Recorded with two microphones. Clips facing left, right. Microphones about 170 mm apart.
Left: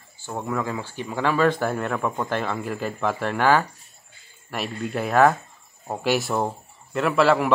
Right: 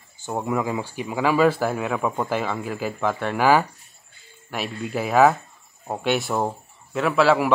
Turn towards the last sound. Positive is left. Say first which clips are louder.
# right 1 dB
turn(degrees=0)  # may be behind; listen again after turning